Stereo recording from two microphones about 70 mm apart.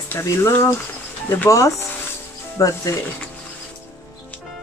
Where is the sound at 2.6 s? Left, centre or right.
Left.